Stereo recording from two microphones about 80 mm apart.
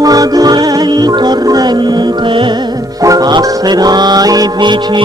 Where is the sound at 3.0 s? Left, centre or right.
Right.